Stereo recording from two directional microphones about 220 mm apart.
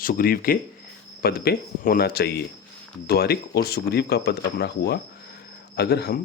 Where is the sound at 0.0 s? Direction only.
40° left (ahead or behind).